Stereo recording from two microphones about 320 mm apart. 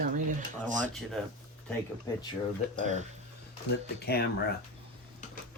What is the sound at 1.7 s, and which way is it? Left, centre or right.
Speech, centre.